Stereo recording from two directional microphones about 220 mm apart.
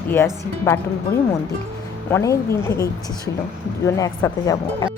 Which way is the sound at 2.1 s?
10° left (ahead or behind).